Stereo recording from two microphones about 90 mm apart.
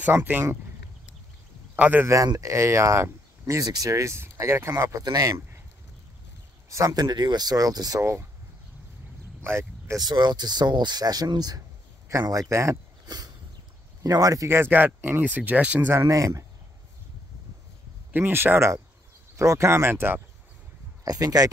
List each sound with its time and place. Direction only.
0.0 s speech: 20° right (ahead or behind)
1.8 s speech: 20° right (ahead or behind)
2.0 s speech: 40° right (ahead or behind)
6.7 s speech: 40° right (ahead or behind)
9.4 s speech: 30° right (ahead or behind)
9.9 s speech: 50° right (ahead or behind)
14.5 s speech: 25° right (ahead or behind)
15.9 s speech: 35° right (ahead or behind)
18.1 s speech: 25° right (ahead or behind)
21.0 s speech: 45° right (ahead or behind)